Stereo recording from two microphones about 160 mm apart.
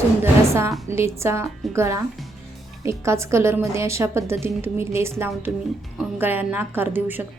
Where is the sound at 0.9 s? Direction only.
15° right (ahead or behind).